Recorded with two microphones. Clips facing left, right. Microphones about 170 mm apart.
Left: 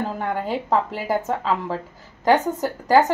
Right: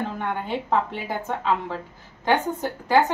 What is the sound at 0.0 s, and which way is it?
A woman's voice, 40° left (ahead or behind).